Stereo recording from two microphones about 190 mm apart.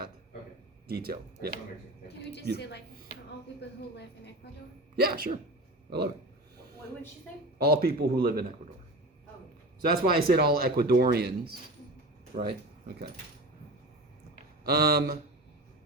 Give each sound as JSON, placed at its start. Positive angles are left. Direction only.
{"t": 0.9, "sound": "speech", "side_deg": -55}
{"t": 2.6, "sound": "speech", "side_deg": 65}
{"t": 4.9, "sound": "speech", "side_deg": -55}
{"t": 7.6, "sound": "speech", "side_deg": -55}
{"t": 9.8, "sound": "speech", "side_deg": -50}
{"t": 12.3, "sound": "speech", "side_deg": -40}
{"t": 14.6, "sound": "speech", "side_deg": -55}